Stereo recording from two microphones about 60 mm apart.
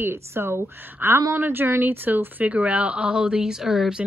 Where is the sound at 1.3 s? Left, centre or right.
Right; by 4.0 s centre.